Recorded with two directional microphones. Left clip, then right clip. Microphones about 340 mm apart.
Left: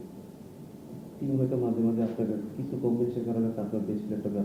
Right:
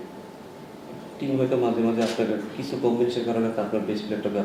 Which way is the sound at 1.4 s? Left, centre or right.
Centre.